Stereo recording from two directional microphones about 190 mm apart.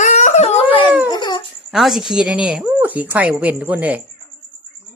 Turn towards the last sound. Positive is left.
turn(degrees=-10)  # may be behind; listen again after turning